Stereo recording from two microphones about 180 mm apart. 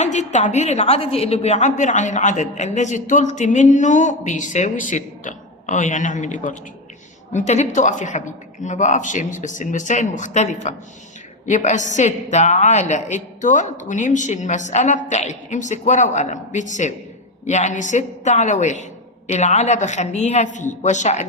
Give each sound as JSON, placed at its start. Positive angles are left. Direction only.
{"t": 0.0, "sound": "a woman's voice", "side_deg": 40}